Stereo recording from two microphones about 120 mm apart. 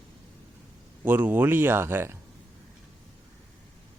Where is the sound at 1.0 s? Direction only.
15° right (ahead or behind).